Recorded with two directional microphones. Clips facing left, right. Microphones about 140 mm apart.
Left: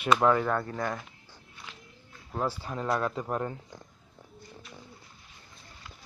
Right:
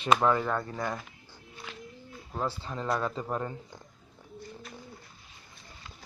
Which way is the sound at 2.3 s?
10° left (ahead or behind).